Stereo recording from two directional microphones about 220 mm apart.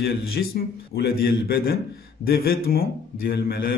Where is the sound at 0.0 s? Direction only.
45° left (ahead or behind).